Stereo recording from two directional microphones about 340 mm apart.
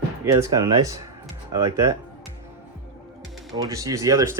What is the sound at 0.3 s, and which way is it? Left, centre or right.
Speech, centre.